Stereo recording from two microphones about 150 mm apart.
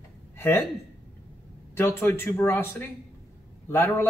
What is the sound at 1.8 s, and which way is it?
A man's voice, 15° left (ahead or behind).